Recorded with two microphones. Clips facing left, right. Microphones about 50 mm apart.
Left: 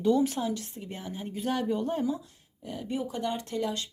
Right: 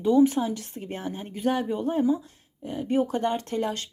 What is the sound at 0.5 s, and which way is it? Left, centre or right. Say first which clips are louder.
Speech: right 4 dB; right.